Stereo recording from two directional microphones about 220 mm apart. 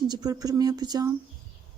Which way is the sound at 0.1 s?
20° right (ahead or behind).